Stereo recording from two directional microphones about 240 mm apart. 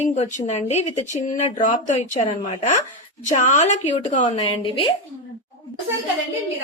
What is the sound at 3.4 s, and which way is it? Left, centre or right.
A woman's voice, left.